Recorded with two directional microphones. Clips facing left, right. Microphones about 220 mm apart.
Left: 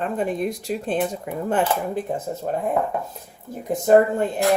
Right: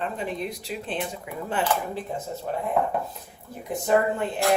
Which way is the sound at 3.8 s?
45° left (ahead or behind).